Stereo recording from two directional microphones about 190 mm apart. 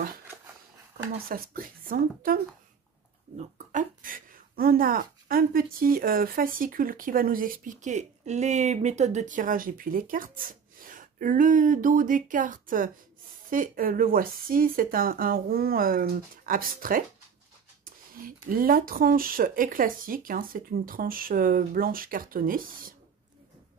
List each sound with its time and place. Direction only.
0.9 s speech: 50° right (ahead or behind)
18.1 s speech: 50° right (ahead or behind)